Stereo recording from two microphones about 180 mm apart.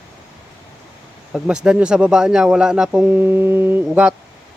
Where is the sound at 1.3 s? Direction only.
5° right (ahead or behind).